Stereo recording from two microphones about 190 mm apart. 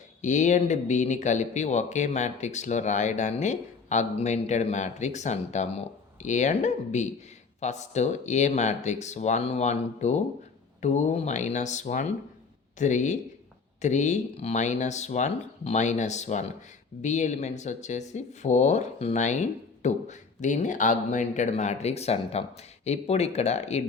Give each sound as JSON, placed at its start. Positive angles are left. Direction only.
{"t": 0.2, "sound": "speech", "side_deg": 40}